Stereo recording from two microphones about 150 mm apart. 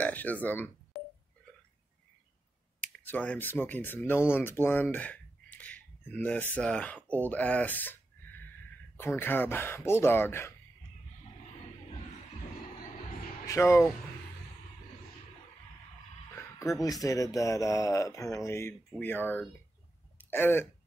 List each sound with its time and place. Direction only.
0.0 s speech: 10° left (ahead or behind)
3.1 s speech: 10° left (ahead or behind)
4.9 s a sound: 10° left (ahead or behind)
7.2 s speech: 10° left (ahead or behind)
13.5 s speech: 20° left (ahead or behind)
16.3 s a sound: 20° left (ahead or behind)
16.8 s speech: 25° left (ahead or behind)